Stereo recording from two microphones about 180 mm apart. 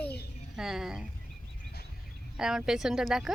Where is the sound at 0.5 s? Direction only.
5° right (ahead or behind).